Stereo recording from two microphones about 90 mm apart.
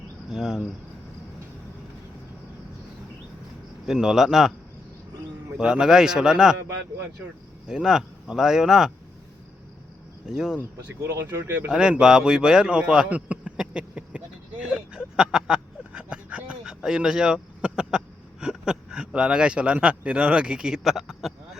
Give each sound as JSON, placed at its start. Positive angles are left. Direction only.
{"t": 0.3, "sound": "speech", "side_deg": -5}
{"t": 3.8, "sound": "speech", "side_deg": -5}
{"t": 5.5, "sound": "speech", "side_deg": -5}
{"t": 7.7, "sound": "speech", "side_deg": -5}
{"t": 10.2, "sound": "speech", "side_deg": -5}
{"t": 11.1, "sound": "speech", "side_deg": -25}
{"t": 11.7, "sound": "a man's voice", "side_deg": -10}
{"t": 14.6, "sound": "a sound", "side_deg": -10}